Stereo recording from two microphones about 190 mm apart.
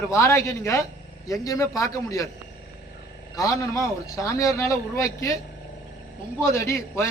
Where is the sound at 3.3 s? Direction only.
20° left (ahead or behind).